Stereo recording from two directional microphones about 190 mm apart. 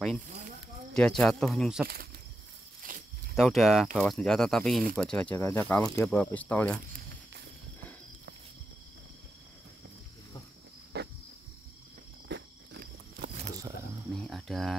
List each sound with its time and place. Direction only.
0.9 s speech: 5° left (ahead or behind)
2.8 s snake: 45° right (ahead or behind)
3.3 s speech: centre (ahead or behind)
10.9 s cricket: 60° right (ahead or behind)
12.3 s a sound: 55° right (ahead or behind)
14.1 s a sound: centre (ahead or behind)